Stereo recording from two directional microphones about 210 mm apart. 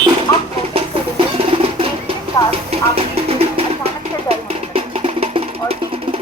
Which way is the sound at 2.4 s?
20° left (ahead or behind).